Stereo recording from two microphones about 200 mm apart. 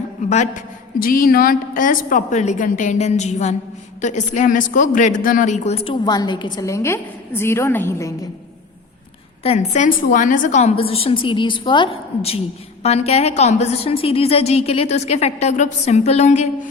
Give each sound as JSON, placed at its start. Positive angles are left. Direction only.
{"t": 0.3, "sound": "a woman's voice", "side_deg": 35}
{"t": 9.4, "sound": "a woman's voice", "side_deg": 35}